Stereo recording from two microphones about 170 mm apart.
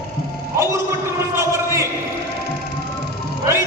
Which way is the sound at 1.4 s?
15° right (ahead or behind).